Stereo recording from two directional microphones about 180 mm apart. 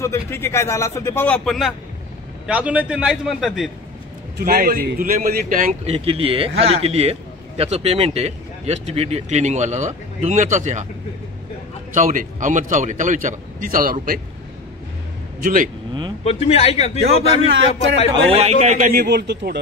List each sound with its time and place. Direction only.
0.0 s a man's voice: 15° left (ahead or behind); by 3.7 s centre (ahead or behind)
4.4 s a man's voice: 55° right (ahead or behind)
5.9 s a man's voice: 30° right (ahead or behind)
11.9 s a man's voice: 45° right (ahead or behind)
15.4 s a man's voice: 45° right (ahead or behind)
16.3 s a man's voice: 35° left (ahead or behind)
18.3 s a man's voice: 35° right (ahead or behind)
18.9 s speech: 65° right (ahead or behind)